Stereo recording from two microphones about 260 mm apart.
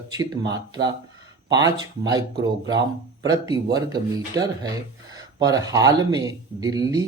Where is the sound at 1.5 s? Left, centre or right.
Centre.